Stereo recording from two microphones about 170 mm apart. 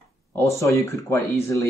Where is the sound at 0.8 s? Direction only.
20° left (ahead or behind).